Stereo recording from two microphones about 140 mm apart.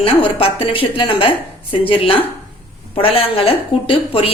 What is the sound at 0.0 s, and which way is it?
Speech, 40° left (ahead or behind).